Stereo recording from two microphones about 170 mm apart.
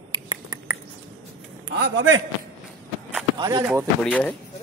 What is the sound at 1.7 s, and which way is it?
Speech, 85° right.